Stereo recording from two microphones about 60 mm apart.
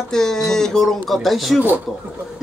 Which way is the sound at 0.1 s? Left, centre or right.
Centre.